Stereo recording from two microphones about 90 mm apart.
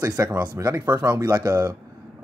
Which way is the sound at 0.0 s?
35° right (ahead or behind).